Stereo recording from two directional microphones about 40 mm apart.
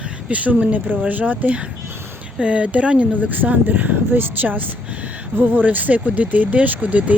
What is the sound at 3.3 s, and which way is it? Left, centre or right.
Speech, right.